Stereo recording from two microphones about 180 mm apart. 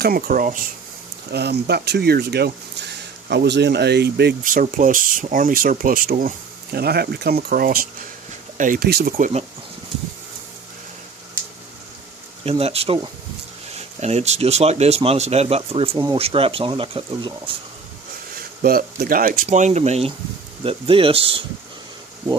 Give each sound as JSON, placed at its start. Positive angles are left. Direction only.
{"t": 0.0, "sound": "speech", "side_deg": -50}
{"t": 1.3, "sound": "speech", "side_deg": -65}
{"t": 4.4, "sound": "speech", "side_deg": -45}
{"t": 12.5, "sound": "speech", "side_deg": -35}
{"t": 14.0, "sound": "speech", "side_deg": -40}
{"t": 18.6, "sound": "speech", "side_deg": -55}